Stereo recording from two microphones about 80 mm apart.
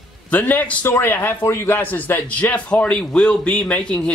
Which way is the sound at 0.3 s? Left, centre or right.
Left.